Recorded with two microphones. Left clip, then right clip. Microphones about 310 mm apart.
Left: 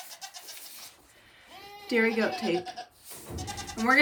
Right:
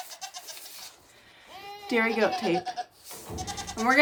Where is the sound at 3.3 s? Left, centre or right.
Right.